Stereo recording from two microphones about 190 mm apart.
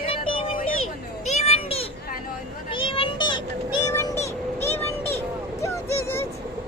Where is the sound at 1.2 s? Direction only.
35° left (ahead or behind).